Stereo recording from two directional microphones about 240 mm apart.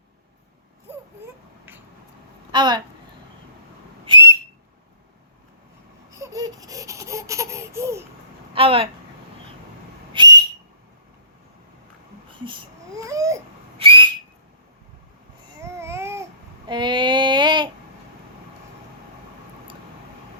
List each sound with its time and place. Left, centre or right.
2.5 s speech: centre
4.0 s whistle: centre
6.1 s baby cry: centre
8.5 s speech: right
10.1 s whistle: centre
12.5 s whistle: centre
15.6 s babbling: centre